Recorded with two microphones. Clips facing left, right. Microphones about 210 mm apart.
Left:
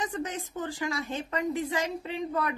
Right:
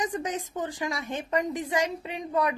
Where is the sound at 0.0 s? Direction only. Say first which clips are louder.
Right 3 dB; 15° right (ahead or behind).